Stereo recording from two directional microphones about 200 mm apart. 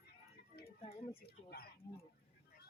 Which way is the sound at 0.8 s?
30° left (ahead or behind).